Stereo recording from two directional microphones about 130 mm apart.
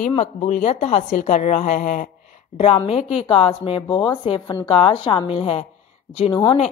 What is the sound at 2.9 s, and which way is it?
A woman's voice, 50° left (ahead or behind).